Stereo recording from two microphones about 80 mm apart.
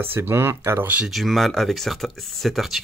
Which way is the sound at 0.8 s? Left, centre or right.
Centre.